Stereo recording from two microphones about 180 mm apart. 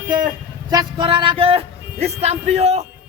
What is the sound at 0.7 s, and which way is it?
Speech, 25° right (ahead or behind).